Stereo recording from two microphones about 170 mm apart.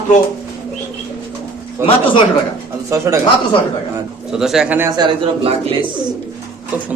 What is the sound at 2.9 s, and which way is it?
Speech, 20° right (ahead or behind).